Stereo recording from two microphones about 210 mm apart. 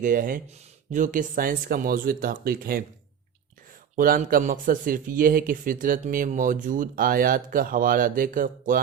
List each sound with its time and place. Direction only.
0.0 s speech: 40° right (ahead or behind)
3.9 s speech: 40° right (ahead or behind)